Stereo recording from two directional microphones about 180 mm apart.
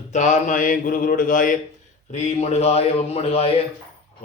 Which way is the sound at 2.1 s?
40° left (ahead or behind).